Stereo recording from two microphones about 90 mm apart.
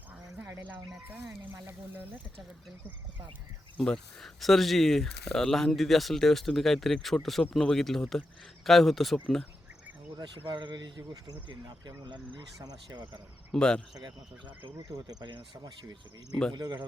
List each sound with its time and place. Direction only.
3.8 s speech: 5° left (ahead or behind)
10.4 s speech: 60° right (ahead or behind)
13.5 s speech: 10° left (ahead or behind)
13.9 s speech: 55° right (ahead or behind)
14.8 s speech: 45° right (ahead or behind)